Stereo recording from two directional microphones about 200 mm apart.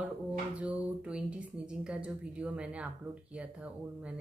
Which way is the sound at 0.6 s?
5° right (ahead or behind).